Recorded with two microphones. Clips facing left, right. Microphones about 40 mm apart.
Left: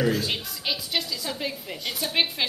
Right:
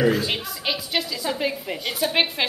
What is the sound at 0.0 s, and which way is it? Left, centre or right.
A woman's voice, centre.